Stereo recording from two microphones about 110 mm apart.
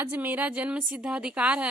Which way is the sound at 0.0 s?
15° right (ahead or behind).